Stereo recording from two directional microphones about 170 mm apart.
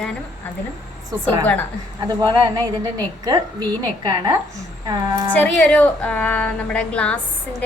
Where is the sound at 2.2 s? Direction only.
25° right (ahead or behind).